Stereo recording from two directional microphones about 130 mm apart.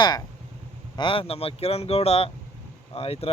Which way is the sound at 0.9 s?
40° left (ahead or behind).